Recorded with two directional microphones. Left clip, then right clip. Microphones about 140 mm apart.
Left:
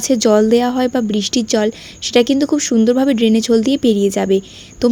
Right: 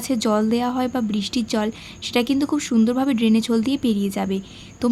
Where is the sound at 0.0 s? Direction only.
40° left (ahead or behind).